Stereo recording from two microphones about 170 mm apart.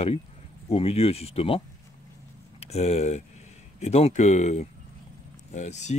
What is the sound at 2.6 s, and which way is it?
Speech, 40° left (ahead or behind).